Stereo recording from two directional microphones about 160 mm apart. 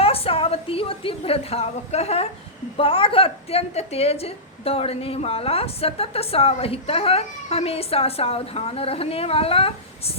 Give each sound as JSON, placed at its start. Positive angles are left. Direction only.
{"t": 0.0, "sound": "a woman's voice", "side_deg": 35}